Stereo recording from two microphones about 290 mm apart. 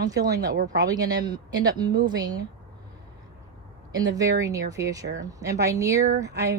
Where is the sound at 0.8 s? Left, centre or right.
Centre.